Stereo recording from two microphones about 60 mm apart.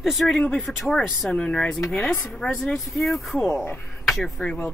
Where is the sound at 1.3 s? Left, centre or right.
Centre.